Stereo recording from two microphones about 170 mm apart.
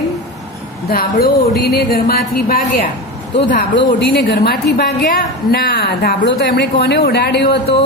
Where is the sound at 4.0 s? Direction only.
85° left.